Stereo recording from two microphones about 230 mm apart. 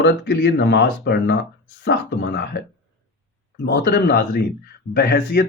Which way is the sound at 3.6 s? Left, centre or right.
Left.